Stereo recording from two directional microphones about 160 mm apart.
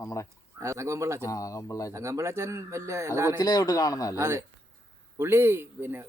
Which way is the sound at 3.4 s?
25° left (ahead or behind).